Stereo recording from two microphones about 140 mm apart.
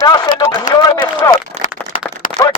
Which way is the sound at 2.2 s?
75° left (ahead or behind).